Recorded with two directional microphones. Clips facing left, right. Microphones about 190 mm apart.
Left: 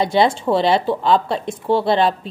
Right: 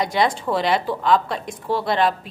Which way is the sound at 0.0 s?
30° left (ahead or behind).